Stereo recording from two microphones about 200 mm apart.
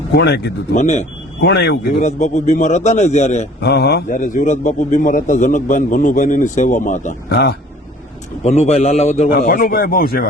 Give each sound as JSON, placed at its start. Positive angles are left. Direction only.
{"t": 0.1, "sound": "speech", "side_deg": 55}
{"t": 0.8, "sound": "a man's voice", "side_deg": 35}
{"t": 1.4, "sound": "speech", "side_deg": 55}
{"t": 2.0, "sound": "a man's voice", "side_deg": 35}
{"t": 3.6, "sound": "a man's voice", "side_deg": 55}
{"t": 7.3, "sound": "speech", "side_deg": 55}
{"t": 8.4, "sound": "a man's voice", "side_deg": 35}
{"t": 9.4, "sound": "speech", "side_deg": 45}